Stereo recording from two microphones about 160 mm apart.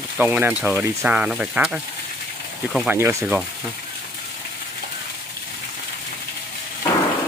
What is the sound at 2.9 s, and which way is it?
Frying, 15° right (ahead or behind).